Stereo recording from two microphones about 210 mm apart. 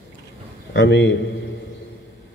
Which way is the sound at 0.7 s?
60° left (ahead or behind).